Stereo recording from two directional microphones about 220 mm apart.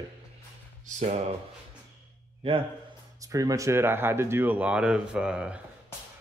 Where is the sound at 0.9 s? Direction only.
30° right (ahead or behind).